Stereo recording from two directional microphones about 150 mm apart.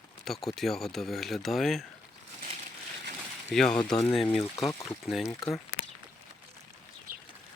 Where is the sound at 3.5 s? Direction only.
5° left (ahead or behind).